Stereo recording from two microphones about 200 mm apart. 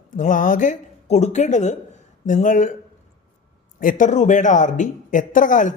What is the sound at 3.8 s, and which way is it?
Speech, 40° left (ahead or behind).